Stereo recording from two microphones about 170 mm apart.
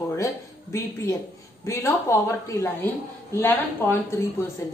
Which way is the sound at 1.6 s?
15° left (ahead or behind).